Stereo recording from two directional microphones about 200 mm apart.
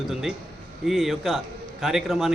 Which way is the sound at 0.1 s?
Centre (ahead or behind).